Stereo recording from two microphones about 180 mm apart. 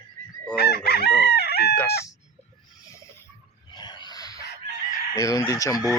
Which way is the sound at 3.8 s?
25° left (ahead or behind).